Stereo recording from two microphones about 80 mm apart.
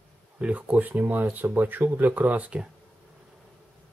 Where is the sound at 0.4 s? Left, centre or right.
Centre.